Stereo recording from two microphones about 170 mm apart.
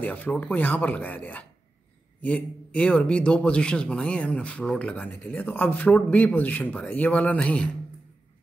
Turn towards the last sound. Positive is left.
turn(degrees=5)  # may be behind; listen again after turning